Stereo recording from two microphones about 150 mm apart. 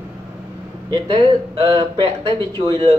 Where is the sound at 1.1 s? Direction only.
40° right (ahead or behind).